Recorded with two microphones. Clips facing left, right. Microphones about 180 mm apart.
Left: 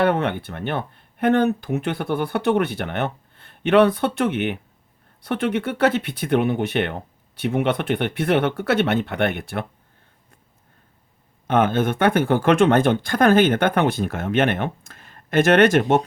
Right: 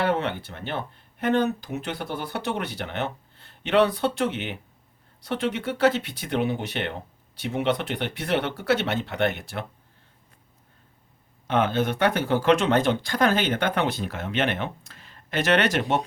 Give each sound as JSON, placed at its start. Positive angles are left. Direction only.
{"t": 0.0, "sound": "speech", "side_deg": 55}
{"t": 11.4, "sound": "speech", "side_deg": 50}